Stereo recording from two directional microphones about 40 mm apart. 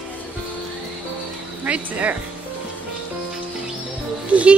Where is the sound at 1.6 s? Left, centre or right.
Right.